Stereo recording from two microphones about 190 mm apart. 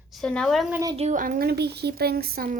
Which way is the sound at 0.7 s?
15° right (ahead or behind).